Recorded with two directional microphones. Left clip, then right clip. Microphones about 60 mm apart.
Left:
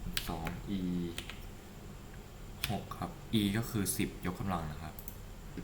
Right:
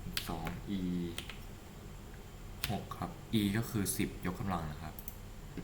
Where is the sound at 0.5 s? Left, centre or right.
Centre.